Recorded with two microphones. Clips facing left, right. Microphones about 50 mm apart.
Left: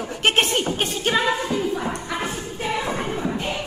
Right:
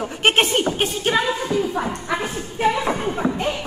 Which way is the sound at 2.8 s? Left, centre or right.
Right.